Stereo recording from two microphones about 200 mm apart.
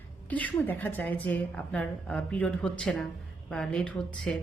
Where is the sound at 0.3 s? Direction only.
10° left (ahead or behind).